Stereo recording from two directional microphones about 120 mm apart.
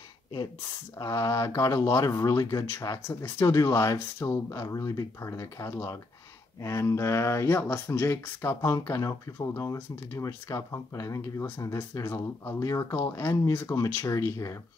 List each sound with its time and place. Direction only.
0.9 s speech: 30° left (ahead or behind)